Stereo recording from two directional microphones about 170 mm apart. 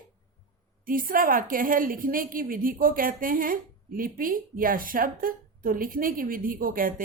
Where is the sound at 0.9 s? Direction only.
55° right (ahead or behind).